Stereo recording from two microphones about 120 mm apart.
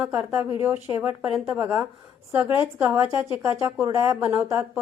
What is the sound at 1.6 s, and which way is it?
A woman's voice, 20° right (ahead or behind).